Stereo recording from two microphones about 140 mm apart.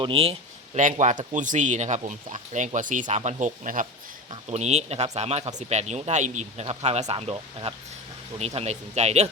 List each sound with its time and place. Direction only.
0.0 s speech: 40° right (ahead or behind)
0.8 s speech: 65° right (ahead or behind)
4.4 s a man's voice: 55° right (ahead or behind)